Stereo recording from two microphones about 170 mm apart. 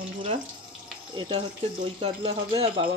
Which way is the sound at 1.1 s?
25° right (ahead or behind).